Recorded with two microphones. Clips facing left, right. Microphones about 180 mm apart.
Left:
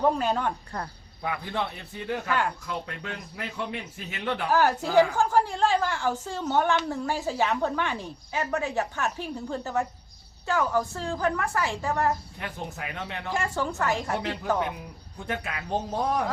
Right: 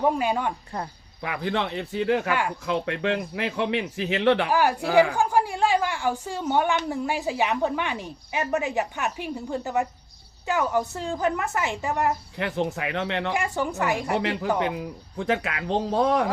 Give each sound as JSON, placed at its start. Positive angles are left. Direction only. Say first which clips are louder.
{"t": 0.0, "sound": "a woman's voice", "louder": "right 1 dB", "side_deg": -10}
{"t": 1.2, "sound": "speech", "louder": "right 3 dB", "side_deg": -90}
{"t": 4.4, "sound": "a woman's voice", "louder": "right 1 dB", "side_deg": -10}
{"t": 12.4, "sound": "speech", "louder": "right 9 dB", "side_deg": -90}
{"t": 13.3, "sound": "a woman's voice", "louder": "right 2 dB", "side_deg": -15}
{"t": 14.6, "sound": "speech", "louder": "right 4 dB", "side_deg": -90}